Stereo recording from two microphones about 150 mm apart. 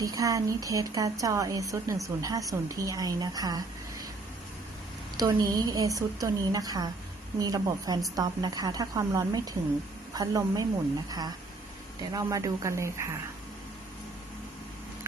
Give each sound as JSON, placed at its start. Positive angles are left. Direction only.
{"t": 0.0, "sound": "speech", "side_deg": -25}
{"t": 5.1, "sound": "speech", "side_deg": -25}
{"t": 12.1, "sound": "speech", "side_deg": -20}